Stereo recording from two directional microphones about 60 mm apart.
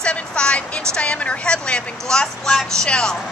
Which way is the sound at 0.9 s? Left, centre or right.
Centre.